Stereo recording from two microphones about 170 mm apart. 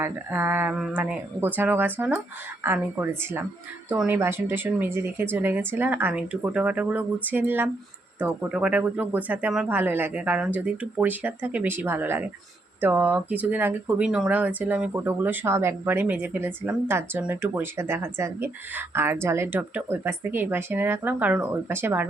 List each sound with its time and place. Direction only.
0.0 s speech: 10° right (ahead or behind)